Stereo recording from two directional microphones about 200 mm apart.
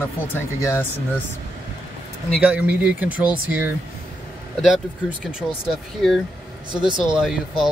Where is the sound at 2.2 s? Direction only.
5° right (ahead or behind).